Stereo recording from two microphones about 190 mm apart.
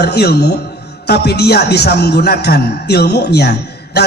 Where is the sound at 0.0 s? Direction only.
60° left (ahead or behind).